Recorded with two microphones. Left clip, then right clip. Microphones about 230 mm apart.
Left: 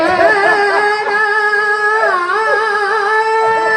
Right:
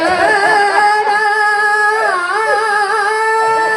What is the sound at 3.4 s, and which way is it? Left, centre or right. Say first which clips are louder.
Music: even; right.